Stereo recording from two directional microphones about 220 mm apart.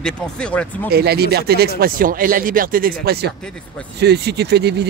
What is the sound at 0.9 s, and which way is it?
Speech, 45° right (ahead or behind).